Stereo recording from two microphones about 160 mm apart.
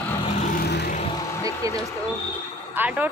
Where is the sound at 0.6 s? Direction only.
90° left.